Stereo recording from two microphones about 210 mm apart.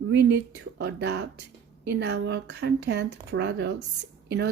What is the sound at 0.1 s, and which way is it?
A woman's voice, 55° right (ahead or behind).